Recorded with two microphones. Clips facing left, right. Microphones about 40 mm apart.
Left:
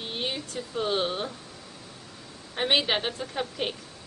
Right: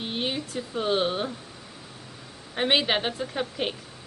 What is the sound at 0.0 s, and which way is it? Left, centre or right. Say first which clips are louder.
Speech: right 3 dB; centre.